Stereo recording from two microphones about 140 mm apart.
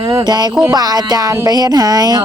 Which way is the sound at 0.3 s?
30° right (ahead or behind).